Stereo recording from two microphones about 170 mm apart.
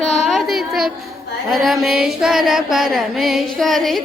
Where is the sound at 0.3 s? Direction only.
Centre (ahead or behind).